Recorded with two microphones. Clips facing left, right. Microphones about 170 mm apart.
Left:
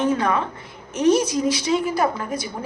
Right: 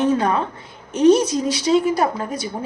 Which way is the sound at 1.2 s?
70° right (ahead or behind).